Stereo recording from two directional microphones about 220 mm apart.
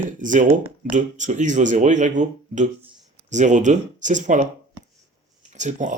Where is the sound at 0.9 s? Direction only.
35° right (ahead or behind).